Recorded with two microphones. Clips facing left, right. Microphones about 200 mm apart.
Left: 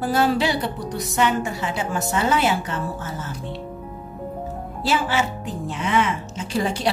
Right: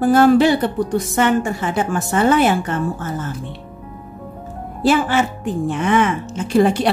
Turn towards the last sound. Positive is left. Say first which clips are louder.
# right 9 dB
turn(degrees=-55)  # may be behind; listen again after turning